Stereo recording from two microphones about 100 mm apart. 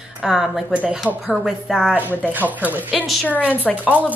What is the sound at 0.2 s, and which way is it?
A woman's voice, 5° right (ahead or behind).